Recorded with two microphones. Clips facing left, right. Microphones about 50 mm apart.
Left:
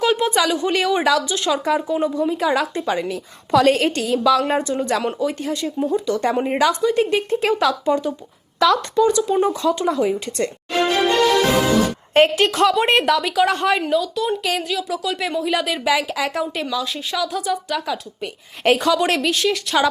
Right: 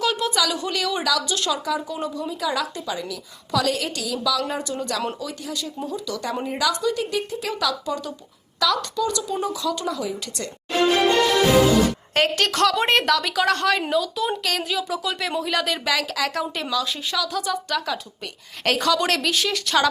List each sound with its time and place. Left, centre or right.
0.0 s speech: left
12.4 s a woman's voice: centre
13.9 s a woman's voice: centre